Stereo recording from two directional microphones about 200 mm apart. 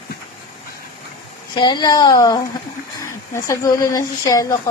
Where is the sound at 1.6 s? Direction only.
20° left (ahead or behind).